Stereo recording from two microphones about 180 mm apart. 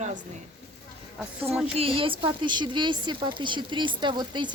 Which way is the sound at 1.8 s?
30° right (ahead or behind).